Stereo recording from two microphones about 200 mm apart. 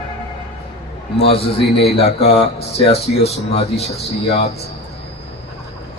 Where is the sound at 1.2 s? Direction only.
25° left (ahead or behind).